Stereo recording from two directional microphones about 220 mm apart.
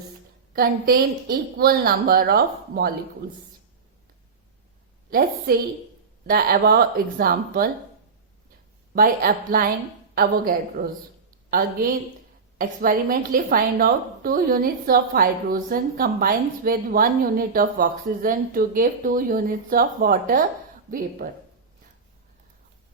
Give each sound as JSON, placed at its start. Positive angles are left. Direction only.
{"t": 0.5, "sound": "a woman's voice", "side_deg": -45}
{"t": 6.2, "sound": "a woman's voice", "side_deg": -45}
{"t": 9.0, "sound": "a woman's voice", "side_deg": -40}
{"t": 12.5, "sound": "a woman's voice", "side_deg": -40}